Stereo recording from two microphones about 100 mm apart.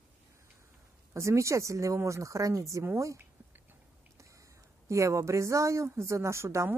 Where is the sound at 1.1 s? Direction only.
30° right (ahead or behind).